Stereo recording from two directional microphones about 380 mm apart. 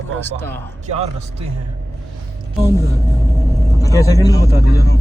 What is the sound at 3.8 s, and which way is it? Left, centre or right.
Speech, centre.